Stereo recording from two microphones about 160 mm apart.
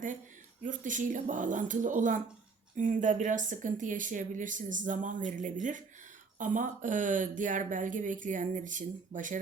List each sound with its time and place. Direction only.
0.6 s speech: 55° right (ahead or behind)